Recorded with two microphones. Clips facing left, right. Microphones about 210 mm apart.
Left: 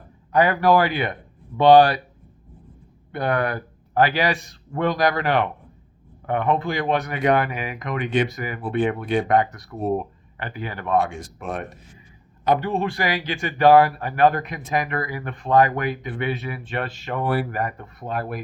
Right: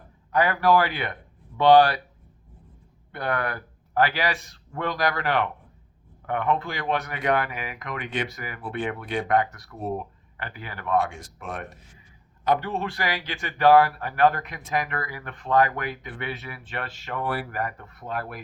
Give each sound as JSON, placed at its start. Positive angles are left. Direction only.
{"t": 0.3, "sound": "a man's voice", "side_deg": 15}
{"t": 3.1, "sound": "a man's voice", "side_deg": 15}